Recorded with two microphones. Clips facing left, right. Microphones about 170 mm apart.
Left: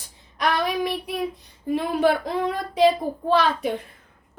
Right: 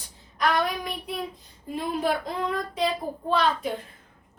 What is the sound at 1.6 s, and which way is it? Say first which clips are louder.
A child's voice: left 6 dB; 70° left (ahead or behind).